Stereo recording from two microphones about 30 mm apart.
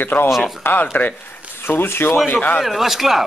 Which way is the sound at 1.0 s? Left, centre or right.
Left.